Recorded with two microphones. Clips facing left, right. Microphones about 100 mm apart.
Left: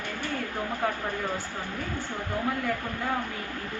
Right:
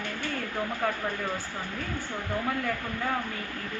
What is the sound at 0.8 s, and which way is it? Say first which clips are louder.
Speech: left 1 dB; 15° left (ahead or behind).